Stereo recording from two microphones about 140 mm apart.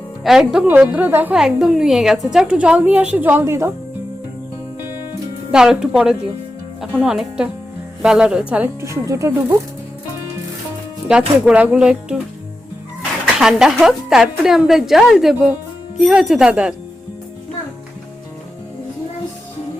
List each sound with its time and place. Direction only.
0.3 s a woman's voice: 5° right (ahead or behind)
5.5 s a woman's voice: 5° right (ahead or behind)
8.8 s speech: 20° right (ahead or behind)
11.1 s a woman's voice: 10° right (ahead or behind)
13.4 s a woman's voice: 5° right (ahead or behind)